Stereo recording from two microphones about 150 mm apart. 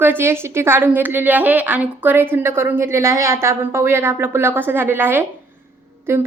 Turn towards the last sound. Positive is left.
turn(degrees=-15)  # may be behind; listen again after turning